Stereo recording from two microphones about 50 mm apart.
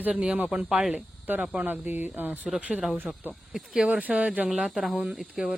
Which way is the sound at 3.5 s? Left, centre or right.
Centre.